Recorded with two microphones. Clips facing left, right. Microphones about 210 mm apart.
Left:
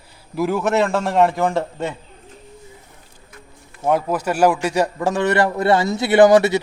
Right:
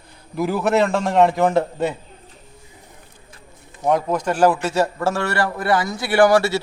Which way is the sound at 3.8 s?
5° left (ahead or behind).